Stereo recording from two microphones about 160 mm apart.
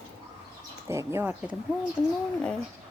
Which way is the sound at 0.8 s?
15° right (ahead or behind).